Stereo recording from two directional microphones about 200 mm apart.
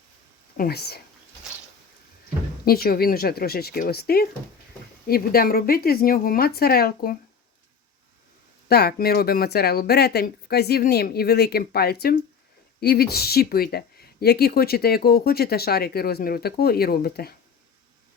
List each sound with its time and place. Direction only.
0.5 s speech: 50° left (ahead or behind)
2.6 s speech: 50° left (ahead or behind)
8.7 s speech: 50° left (ahead or behind)